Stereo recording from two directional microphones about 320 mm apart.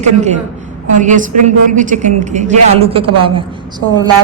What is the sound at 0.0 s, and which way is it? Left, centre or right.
A woman's voice, right.